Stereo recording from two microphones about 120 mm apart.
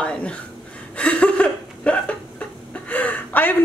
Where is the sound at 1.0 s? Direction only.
10° left (ahead or behind).